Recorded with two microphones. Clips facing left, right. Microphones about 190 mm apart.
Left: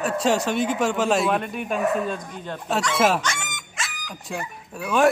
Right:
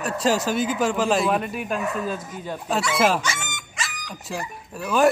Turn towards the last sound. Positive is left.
turn(degrees=0)  # may be behind; listen again after turning